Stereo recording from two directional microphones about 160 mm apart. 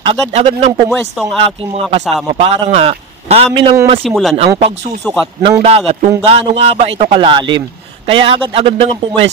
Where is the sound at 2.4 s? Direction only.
35° right (ahead or behind).